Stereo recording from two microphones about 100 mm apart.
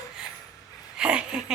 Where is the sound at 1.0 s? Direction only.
10° right (ahead or behind).